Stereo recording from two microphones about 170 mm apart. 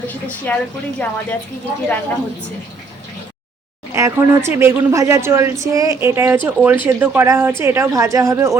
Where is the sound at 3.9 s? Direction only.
15° right (ahead or behind).